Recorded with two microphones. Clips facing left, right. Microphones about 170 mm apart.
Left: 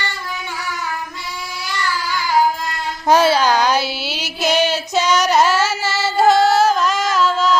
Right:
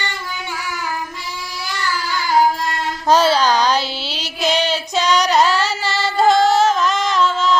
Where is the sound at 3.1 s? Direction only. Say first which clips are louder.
Left 1 dB; 10° left (ahead or behind).